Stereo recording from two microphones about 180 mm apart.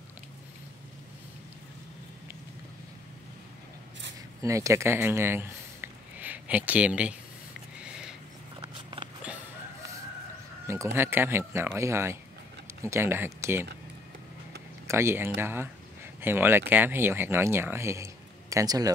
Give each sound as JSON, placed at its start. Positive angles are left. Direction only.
{"t": 4.4, "sound": "speech", "side_deg": -15}
{"t": 8.5, "sound": "a sound", "side_deg": -25}
{"t": 11.0, "sound": "speech", "side_deg": -10}
{"t": 14.9, "sound": "speech", "side_deg": -15}